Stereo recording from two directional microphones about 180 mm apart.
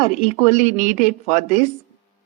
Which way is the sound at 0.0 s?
40° left (ahead or behind).